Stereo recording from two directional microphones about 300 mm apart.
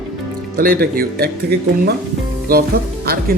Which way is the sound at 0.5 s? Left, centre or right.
Right.